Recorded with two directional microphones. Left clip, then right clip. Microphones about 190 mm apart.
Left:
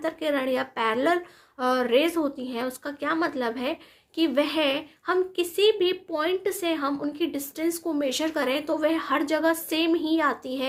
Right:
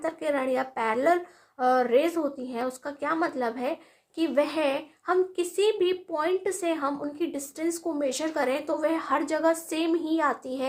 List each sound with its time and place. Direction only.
0.0 s speech: 20° left (ahead or behind)